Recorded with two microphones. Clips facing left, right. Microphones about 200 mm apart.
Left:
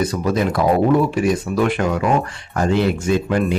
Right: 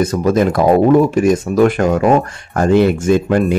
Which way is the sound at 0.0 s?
45° right (ahead or behind).